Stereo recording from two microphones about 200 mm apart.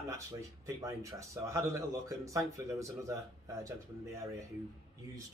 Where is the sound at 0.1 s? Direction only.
15° right (ahead or behind).